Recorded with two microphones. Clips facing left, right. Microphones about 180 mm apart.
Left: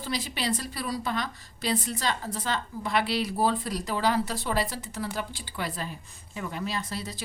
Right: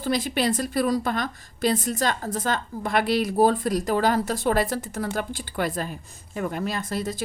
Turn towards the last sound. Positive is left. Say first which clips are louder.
# right 6 dB
turn(degrees=-50)  # may be behind; listen again after turning